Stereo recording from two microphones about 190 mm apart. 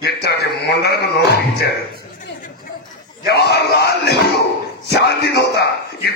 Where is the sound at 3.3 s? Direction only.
55° left (ahead or behind).